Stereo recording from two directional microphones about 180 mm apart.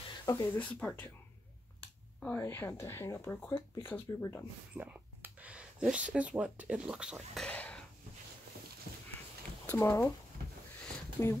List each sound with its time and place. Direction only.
0.2 s speech: 20° left (ahead or behind)
0.6 s speech: 5° left (ahead or behind)
2.1 s speech: 10° left (ahead or behind)
4.7 s a sound: 10° right (ahead or behind)
6.1 s speech: 5° right (ahead or behind)
7.4 s a sound: 10° left (ahead or behind)
9.7 s speech: 15° left (ahead or behind)
11.2 s speech: 15° left (ahead or behind)